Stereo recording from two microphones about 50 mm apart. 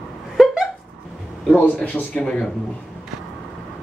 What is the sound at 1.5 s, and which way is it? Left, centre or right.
Speech, left.